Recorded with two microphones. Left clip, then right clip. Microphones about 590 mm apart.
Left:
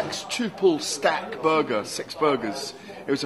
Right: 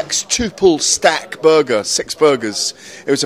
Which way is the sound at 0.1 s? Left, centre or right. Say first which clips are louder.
Right 10 dB; right.